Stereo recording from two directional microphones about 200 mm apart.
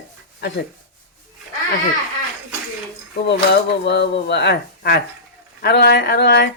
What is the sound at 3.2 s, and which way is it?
A woman's voice, 60° left (ahead or behind).